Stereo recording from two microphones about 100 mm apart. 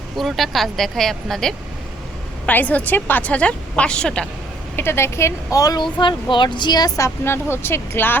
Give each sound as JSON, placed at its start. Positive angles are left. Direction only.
{"t": 0.2, "sound": "speech", "side_deg": 0}
{"t": 2.5, "sound": "a woman's voice", "side_deg": 15}
{"t": 4.8, "sound": "speech", "side_deg": 25}